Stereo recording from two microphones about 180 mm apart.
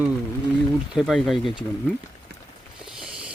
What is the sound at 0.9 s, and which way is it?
Speech, centre (ahead or behind).